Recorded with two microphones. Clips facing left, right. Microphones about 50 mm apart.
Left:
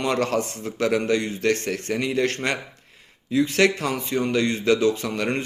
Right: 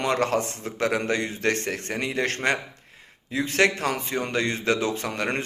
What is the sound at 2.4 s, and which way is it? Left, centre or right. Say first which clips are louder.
Speech: right 1 dB; centre.